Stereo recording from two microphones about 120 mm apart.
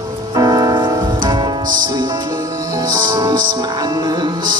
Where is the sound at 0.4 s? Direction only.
30° right (ahead or behind).